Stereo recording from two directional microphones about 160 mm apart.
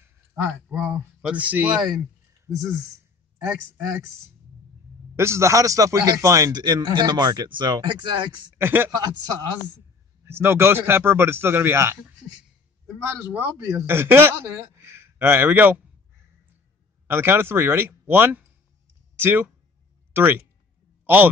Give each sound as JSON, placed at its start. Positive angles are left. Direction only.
{"t": 0.0, "sound": "a sound", "side_deg": -15}
{"t": 0.7, "sound": "speech", "side_deg": -5}
{"t": 2.4, "sound": "speech", "side_deg": -20}
{"t": 3.4, "sound": "a man's voice", "side_deg": -5}
{"t": 5.1, "sound": "a man's voice", "side_deg": -15}
{"t": 8.5, "sound": "speech", "side_deg": -15}
{"t": 8.9, "sound": "a man's voice", "side_deg": -25}
{"t": 17.1, "sound": "speech", "side_deg": -15}
{"t": 21.0, "sound": "a sound", "side_deg": -10}